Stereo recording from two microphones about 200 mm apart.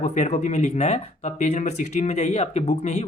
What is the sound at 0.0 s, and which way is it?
Speech, 35° left (ahead or behind).